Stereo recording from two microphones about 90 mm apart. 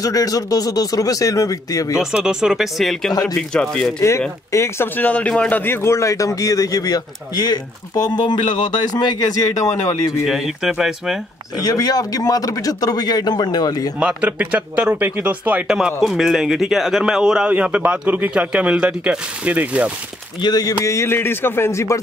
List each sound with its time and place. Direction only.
0.0 s a man's voice: 40° left (ahead or behind)
2.1 s speech: 5° right (ahead or behind)
3.1 s speech: 45° left (ahead or behind)
3.3 s speech: 5° left (ahead or behind)
4.5 s a man's voice: 30° left (ahead or behind)
10.2 s speech: 5° right (ahead or behind)
11.6 s speech: 45° left (ahead or behind)
13.9 s a man's voice: 15° right (ahead or behind)
15.6 s a man's voice: 5° right (ahead or behind)
20.3 s speech: 50° left (ahead or behind)
20.8 s a man's voice: 30° left (ahead or behind)